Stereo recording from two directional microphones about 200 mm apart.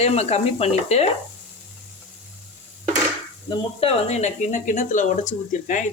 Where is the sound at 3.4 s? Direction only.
30° left (ahead or behind).